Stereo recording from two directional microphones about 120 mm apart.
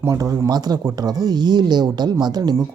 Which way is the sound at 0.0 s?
30° right (ahead or behind).